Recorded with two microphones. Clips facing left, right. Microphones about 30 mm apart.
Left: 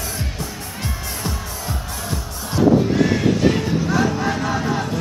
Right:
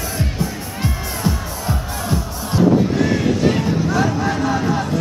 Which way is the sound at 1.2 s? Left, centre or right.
Centre.